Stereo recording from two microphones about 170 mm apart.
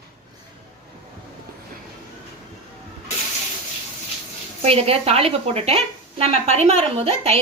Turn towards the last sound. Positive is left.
turn(degrees=-35)  # may be behind; listen again after turning